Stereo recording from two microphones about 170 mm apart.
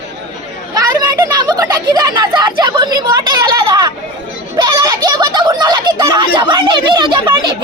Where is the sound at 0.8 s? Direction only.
20° right (ahead or behind).